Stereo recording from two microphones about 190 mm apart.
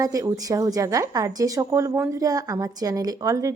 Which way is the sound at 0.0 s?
20° right (ahead or behind).